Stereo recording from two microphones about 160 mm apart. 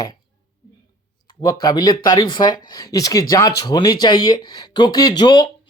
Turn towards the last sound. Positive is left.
turn(degrees=25)  # may be behind; listen again after turning